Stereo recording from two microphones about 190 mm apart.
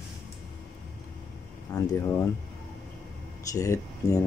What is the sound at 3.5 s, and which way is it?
Speech, 15° left (ahead or behind).